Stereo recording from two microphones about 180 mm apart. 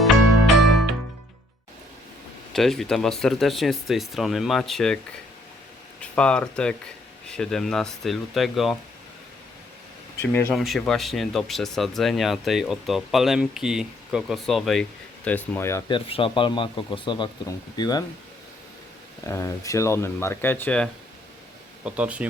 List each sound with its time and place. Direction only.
0.0 s music: centre (ahead or behind)
2.5 s speech: centre (ahead or behind)
6.0 s speech: 5° left (ahead or behind)
10.2 s speech: 15° left (ahead or behind)
10.5 s speech: centre (ahead or behind)
15.9 s speech: 30° left (ahead or behind)
19.3 s speech: 15° left (ahead or behind)
21.8 s speech: 5° right (ahead or behind)